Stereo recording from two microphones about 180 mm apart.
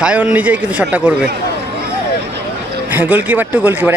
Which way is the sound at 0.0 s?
5° right (ahead or behind).